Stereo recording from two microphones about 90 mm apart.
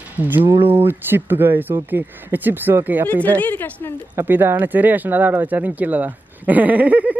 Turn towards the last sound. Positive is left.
turn(degrees=-15)  # may be behind; listen again after turning